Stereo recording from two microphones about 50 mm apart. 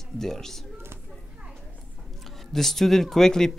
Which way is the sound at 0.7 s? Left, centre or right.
Right.